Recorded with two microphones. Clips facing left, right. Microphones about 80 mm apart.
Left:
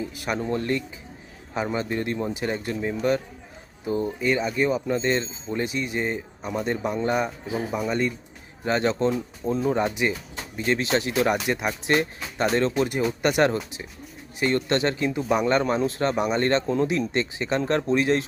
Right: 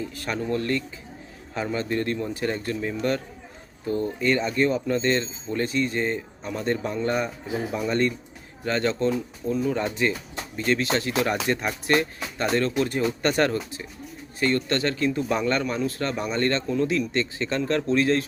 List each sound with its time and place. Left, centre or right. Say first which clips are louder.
0.0 s speech: left 1 dB; centre
8.6 s speech: left 1 dB; centre
15.6 s speech: left 3 dB; left